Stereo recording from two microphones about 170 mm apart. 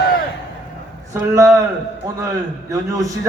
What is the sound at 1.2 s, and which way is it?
Speech, 20° right (ahead or behind).